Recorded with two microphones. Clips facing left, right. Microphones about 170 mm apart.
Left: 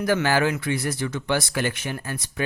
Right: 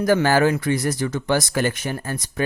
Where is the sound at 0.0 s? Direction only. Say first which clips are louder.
Right 4 dB; 40° right (ahead or behind).